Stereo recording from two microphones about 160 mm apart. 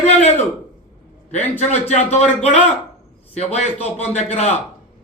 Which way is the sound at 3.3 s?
40° left (ahead or behind).